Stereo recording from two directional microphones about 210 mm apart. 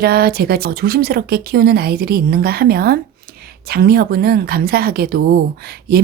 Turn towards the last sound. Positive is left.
turn(degrees=-45)  # may be behind; listen again after turning